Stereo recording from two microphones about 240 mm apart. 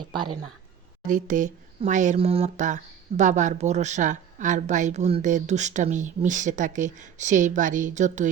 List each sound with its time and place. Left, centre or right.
1.0 s speech: right